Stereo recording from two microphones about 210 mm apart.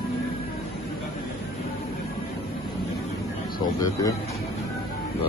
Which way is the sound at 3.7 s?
15° left (ahead or behind).